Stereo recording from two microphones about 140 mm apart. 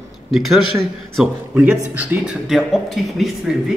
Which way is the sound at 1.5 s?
10° right (ahead or behind).